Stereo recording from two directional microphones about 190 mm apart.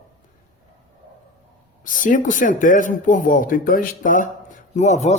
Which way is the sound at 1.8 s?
45° left (ahead or behind).